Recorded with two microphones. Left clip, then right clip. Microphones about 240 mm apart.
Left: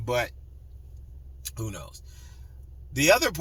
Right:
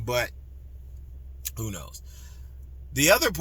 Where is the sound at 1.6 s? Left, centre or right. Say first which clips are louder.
Even; centre.